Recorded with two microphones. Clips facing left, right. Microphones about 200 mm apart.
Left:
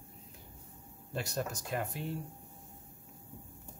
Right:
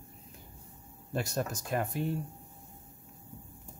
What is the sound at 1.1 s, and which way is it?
Speech, 45° right (ahead or behind).